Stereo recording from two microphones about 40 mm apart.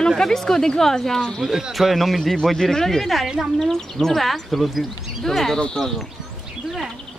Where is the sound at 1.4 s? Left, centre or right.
Centre.